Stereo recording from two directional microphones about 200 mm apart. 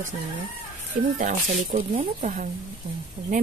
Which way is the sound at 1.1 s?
40° right (ahead or behind).